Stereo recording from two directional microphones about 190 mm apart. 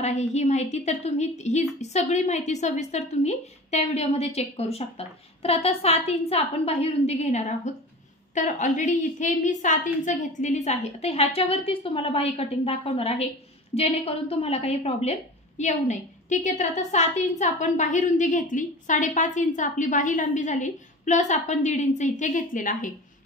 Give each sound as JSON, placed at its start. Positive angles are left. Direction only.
{"t": 0.0, "sound": "a woman's voice", "side_deg": 35}